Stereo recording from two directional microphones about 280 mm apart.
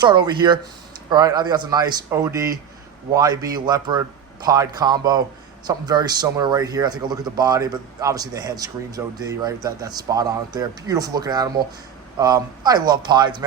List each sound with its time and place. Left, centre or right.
0.0 s a man's voice: centre